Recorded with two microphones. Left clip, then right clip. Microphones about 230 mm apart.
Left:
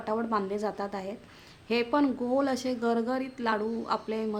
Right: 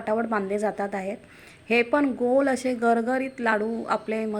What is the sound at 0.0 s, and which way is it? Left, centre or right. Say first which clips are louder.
A woman's voice: right 4 dB; centre.